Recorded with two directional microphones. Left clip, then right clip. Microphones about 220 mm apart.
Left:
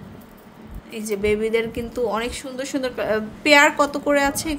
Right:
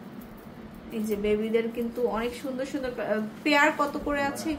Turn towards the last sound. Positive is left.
turn(degrees=55)  # may be behind; listen again after turning